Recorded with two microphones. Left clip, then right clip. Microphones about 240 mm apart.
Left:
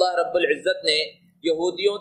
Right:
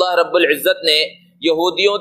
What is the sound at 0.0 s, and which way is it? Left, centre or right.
Speech, right.